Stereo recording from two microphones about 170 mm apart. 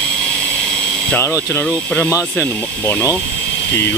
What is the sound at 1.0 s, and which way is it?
Speech, 10° left (ahead or behind).